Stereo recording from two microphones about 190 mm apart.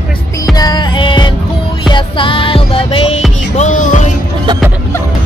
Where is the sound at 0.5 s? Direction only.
20° left (ahead or behind); by 4.0 s 40° left (ahead or behind).